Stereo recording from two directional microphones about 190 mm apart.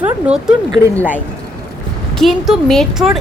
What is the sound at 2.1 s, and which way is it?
Speech, centre (ahead or behind).